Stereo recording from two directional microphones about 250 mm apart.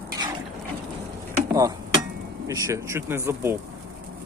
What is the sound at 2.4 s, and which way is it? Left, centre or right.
Speech, centre.